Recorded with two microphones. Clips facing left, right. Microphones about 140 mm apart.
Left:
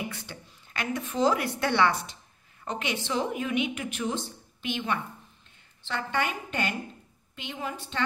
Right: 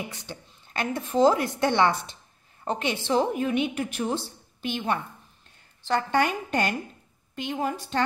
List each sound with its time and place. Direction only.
0.1 s a woman's voice: 20° right (ahead or behind)
0.7 s a woman's voice: 30° right (ahead or behind)